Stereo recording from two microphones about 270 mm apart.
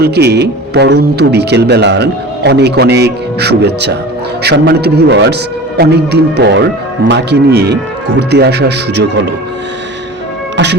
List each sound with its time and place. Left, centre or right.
0.0 s speech: right
10.6 s speech: right